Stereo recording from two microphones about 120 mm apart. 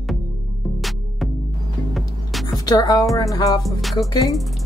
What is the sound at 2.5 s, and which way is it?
Speech, 35° left (ahead or behind).